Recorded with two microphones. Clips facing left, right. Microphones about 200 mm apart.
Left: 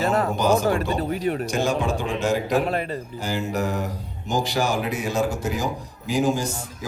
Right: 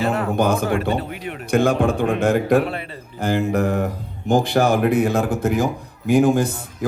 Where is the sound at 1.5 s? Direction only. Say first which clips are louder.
Right 6 dB; 55° right (ahead or behind).